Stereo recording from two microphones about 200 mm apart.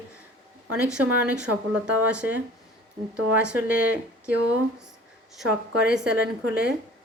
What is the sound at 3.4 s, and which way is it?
Speech, 5° right (ahead or behind).